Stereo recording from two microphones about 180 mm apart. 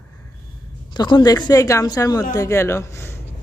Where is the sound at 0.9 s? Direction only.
25° left (ahead or behind).